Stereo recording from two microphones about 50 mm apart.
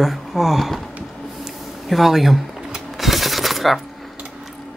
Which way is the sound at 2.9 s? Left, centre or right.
Centre.